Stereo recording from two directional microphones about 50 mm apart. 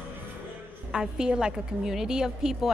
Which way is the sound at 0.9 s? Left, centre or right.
Centre.